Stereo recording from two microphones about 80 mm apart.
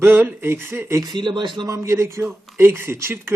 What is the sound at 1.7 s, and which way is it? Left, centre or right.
Speech, right.